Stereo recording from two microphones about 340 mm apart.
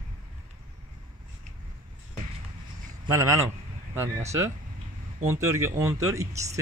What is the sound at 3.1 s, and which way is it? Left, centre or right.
Speech, centre.